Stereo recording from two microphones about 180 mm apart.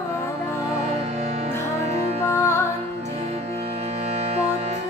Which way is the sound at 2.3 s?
15° left (ahead or behind).